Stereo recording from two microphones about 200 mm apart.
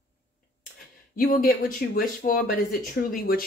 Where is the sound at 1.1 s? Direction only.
45° left (ahead or behind).